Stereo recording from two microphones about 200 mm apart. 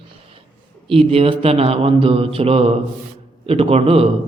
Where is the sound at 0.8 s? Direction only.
30° right (ahead or behind).